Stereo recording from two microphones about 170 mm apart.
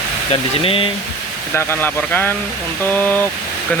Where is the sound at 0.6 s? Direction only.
35° left (ahead or behind).